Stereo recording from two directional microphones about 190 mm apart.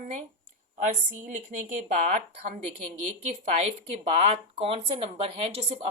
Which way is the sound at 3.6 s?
35° right (ahead or behind).